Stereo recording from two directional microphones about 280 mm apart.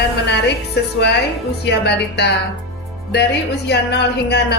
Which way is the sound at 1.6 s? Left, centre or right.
Left.